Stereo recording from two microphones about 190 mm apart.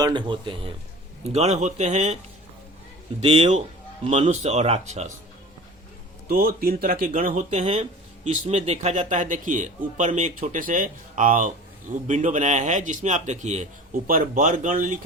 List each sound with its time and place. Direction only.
0.0 s speech: 25° right (ahead or behind)
3.2 s speech: 30° right (ahead or behind)
6.2 s speech: 50° right (ahead or behind)
7.6 s speech: 35° right (ahead or behind)